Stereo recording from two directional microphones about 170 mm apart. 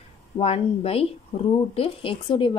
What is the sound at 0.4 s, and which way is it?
A woman's voice, 35° left (ahead or behind).